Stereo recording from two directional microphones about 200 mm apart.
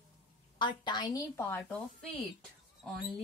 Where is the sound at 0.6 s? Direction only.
20° left (ahead or behind).